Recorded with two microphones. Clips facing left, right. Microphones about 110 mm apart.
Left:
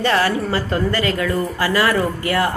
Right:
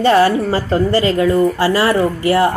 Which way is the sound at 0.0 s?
30° right (ahead or behind).